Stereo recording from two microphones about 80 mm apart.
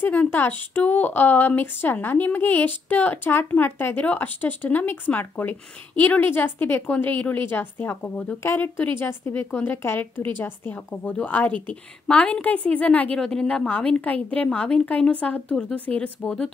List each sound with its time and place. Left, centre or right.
0.0 s a woman's voice: left